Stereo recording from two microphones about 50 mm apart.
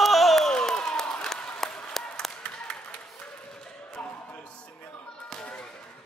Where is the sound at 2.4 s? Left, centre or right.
Centre.